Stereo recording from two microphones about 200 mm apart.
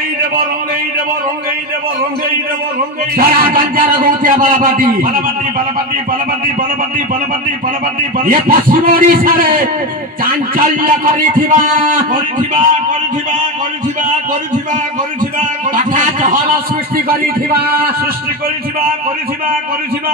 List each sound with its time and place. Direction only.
3.2 s a man's voice: 45° right (ahead or behind)
8.2 s a man's voice: 45° right (ahead or behind)
15.7 s a man's voice: 40° right (ahead or behind)